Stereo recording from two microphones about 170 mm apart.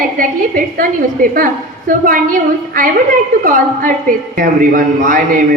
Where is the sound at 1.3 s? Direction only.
50° right (ahead or behind).